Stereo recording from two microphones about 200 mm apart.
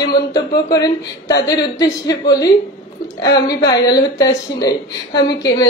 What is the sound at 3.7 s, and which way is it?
Speech, 20° left (ahead or behind).